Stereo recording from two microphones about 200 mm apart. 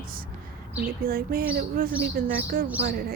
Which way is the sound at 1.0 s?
45° right (ahead or behind).